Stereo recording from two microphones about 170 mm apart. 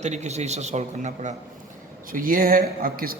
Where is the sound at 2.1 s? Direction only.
55° right (ahead or behind).